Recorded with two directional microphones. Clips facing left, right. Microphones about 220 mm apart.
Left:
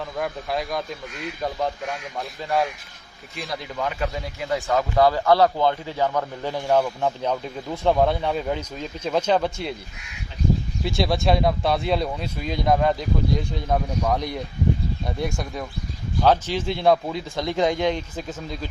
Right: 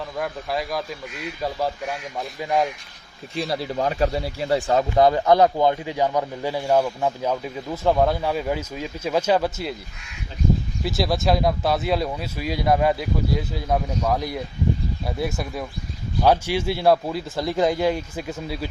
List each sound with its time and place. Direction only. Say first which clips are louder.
0.2 s a man's voice: even; centre (ahead or behind)
3.3 s a man's voice: right 6 dB; 30° right (ahead or behind); by 9.7 s 5° right (ahead or behind)
10.8 s a man's voice: even; centre (ahead or behind)